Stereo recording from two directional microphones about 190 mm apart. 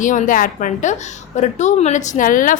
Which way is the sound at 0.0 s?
45° left (ahead or behind).